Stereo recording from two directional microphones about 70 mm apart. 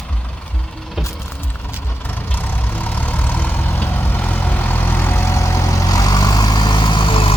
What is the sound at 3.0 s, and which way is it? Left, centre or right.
Vehicle, left.